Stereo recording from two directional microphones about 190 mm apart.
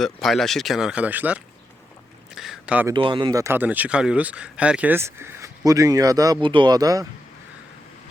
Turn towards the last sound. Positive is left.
turn(degrees=-20)  # may be behind; listen again after turning